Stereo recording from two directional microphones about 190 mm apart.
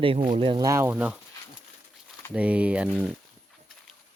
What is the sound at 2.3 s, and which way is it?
Speech, 5° right (ahead or behind).